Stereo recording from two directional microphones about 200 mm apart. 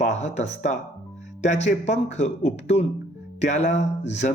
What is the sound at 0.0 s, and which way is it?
Speech, 35° left (ahead or behind).